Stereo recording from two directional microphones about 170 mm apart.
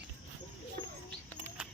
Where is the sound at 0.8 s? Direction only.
25° left (ahead or behind).